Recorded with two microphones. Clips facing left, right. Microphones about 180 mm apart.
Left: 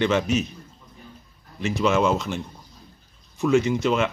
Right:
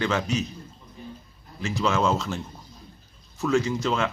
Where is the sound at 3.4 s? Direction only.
20° left (ahead or behind).